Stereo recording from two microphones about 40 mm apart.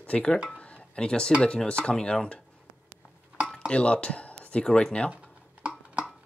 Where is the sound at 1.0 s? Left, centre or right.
Left.